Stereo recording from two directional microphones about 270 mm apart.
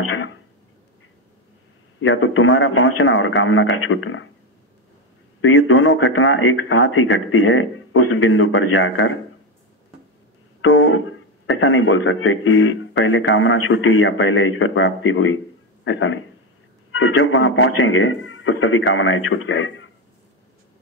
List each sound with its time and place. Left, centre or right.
2.0 s speech: left
5.4 s speech: left
10.6 s speech: left